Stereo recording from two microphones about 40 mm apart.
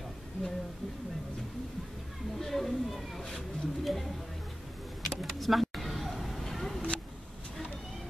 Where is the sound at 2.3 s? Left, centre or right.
Centre.